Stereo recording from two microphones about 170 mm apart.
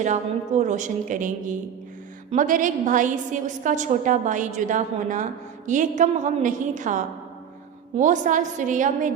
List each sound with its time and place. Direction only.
0.0 s a woman's voice: 45° right (ahead or behind)